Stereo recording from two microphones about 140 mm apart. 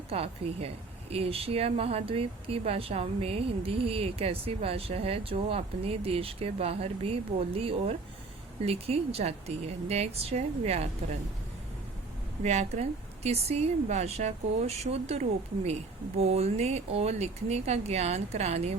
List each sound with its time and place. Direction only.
0.1 s speech: 45° right (ahead or behind)
12.4 s speech: 55° right (ahead or behind)